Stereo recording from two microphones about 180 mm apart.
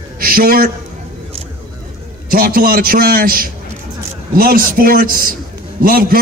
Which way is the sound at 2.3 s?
50° right (ahead or behind).